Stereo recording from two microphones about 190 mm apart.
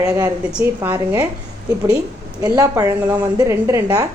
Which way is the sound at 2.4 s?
15° right (ahead or behind).